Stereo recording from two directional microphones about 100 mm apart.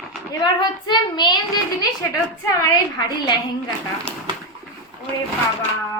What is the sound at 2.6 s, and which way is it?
Speech, 40° left (ahead or behind).